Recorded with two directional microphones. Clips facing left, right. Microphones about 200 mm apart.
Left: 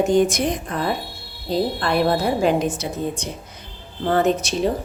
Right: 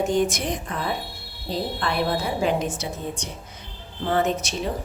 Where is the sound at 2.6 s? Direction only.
35° left (ahead or behind).